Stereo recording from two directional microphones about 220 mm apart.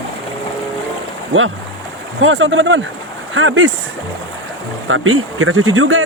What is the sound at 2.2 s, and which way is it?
Speech, 60° right (ahead or behind).